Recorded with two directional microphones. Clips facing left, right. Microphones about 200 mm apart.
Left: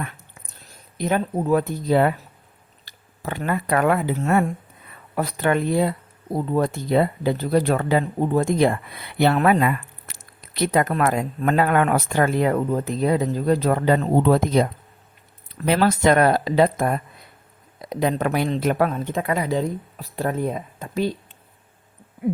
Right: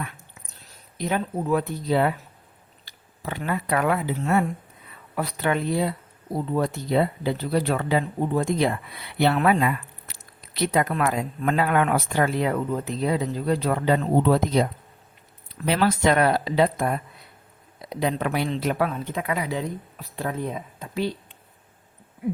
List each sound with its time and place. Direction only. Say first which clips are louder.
0.9 s speech: left 4 dB; 50° left (ahead or behind)